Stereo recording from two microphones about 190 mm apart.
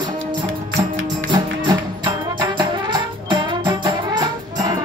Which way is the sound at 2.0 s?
25° right (ahead or behind).